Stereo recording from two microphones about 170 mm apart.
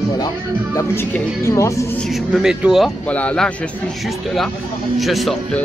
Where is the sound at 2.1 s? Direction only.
5° right (ahead or behind).